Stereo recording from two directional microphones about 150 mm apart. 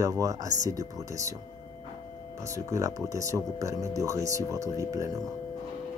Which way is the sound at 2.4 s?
20° right (ahead or behind).